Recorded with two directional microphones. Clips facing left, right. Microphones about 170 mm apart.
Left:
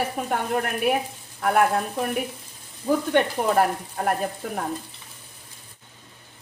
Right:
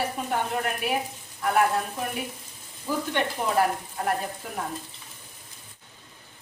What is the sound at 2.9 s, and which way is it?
Speech, 55° left (ahead or behind).